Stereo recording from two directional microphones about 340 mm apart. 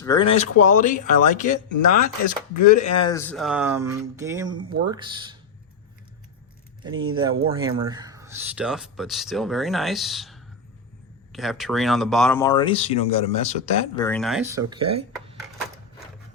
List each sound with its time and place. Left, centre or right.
0.0 s speech: centre
6.8 s speech: centre
14.0 s speech: centre
14.7 s speech: centre